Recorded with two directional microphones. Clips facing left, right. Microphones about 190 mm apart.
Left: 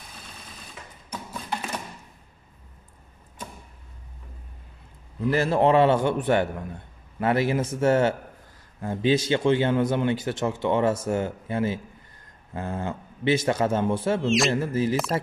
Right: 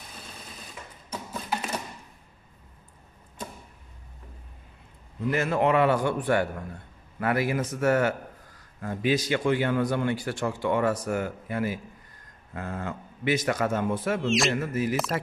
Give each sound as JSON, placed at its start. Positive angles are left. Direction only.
{"t": 5.3, "sound": "speech", "side_deg": 30}
{"t": 14.2, "sound": "a man's voice", "side_deg": 0}
{"t": 14.5, "sound": "speech", "side_deg": 30}